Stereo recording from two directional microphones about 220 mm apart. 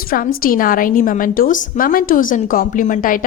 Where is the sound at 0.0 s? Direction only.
40° left (ahead or behind).